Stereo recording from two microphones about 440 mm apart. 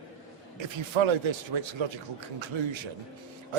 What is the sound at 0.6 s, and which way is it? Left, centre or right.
A man's voice, right.